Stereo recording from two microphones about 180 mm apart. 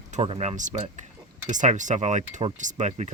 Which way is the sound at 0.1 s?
35° right (ahead or behind).